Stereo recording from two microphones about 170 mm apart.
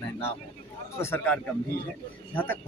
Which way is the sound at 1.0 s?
10° left (ahead or behind).